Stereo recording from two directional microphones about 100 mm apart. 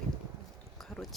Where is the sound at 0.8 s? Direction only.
5° left (ahead or behind).